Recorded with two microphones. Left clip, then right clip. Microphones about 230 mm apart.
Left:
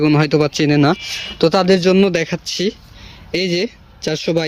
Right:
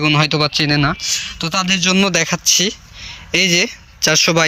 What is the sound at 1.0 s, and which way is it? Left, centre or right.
Speech, left.